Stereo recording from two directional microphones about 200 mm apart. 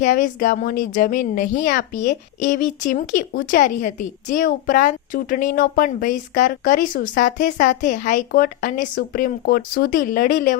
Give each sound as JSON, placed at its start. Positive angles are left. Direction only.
{"t": 0.0, "sound": "a woman's voice", "side_deg": 40}